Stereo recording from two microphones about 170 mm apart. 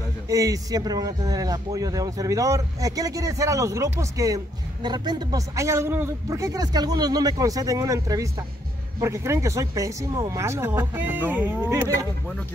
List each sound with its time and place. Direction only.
0.3 s a man's voice: 20° right (ahead or behind)